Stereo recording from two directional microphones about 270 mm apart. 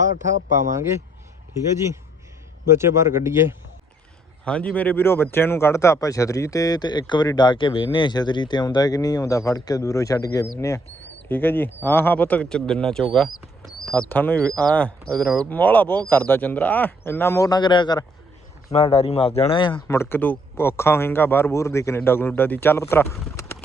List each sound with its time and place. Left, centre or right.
0.7 s speech: centre
2.6 s speech: centre
4.4 s speech: centre